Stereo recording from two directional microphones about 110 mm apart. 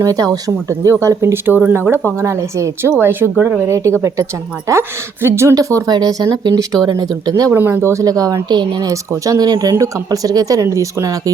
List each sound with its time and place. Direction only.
0.0 s speech: 30° right (ahead or behind)
7.5 s speech: 20° right (ahead or behind); by 8.9 s 40° right (ahead or behind)
8.9 s speech: 30° right (ahead or behind)